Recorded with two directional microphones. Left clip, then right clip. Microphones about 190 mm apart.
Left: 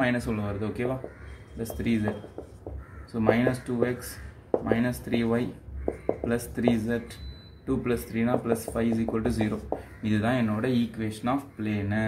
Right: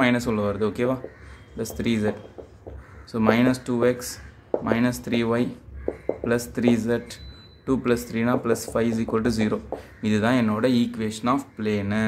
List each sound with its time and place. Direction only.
0.0 s speech: 45° right (ahead or behind)
3.1 s speech: 50° right (ahead or behind)